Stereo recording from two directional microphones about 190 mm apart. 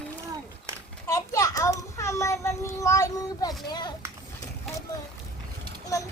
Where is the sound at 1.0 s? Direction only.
15° left (ahead or behind).